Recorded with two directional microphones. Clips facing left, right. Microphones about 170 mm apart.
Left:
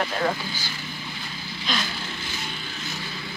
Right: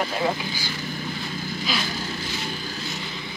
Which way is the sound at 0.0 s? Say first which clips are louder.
Right 1 dB; 10° right (ahead or behind).